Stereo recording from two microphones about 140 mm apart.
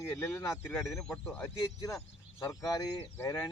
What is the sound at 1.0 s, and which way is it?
Speech, 5° left (ahead or behind).